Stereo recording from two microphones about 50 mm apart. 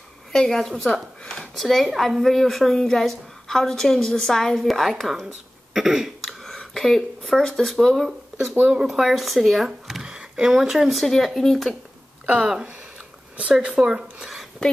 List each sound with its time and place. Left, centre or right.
0.3 s a woman's voice: centre
1.2 s a sound: centre
1.5 s a woman's voice: centre
5.0 s speech: centre
6.7 s a sound: centre
7.3 s speech: centre
9.7 s a sound: centre
10.1 s speech: centre
13.4 s speech: right